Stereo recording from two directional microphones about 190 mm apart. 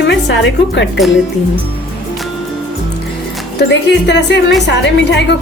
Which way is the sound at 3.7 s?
65° left (ahead or behind).